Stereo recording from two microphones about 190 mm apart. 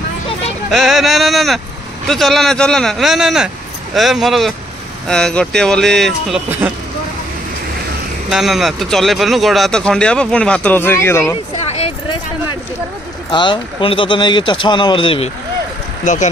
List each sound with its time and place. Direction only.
0.7 s speech: centre (ahead or behind)
8.3 s speech: centre (ahead or behind)
11.5 s a sound: 35° left (ahead or behind)
13.3 s speech: 25° left (ahead or behind)
16.0 s speech: 40° left (ahead or behind)